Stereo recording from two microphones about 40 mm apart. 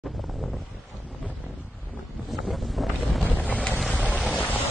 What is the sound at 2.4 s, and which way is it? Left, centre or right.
Boat, centre.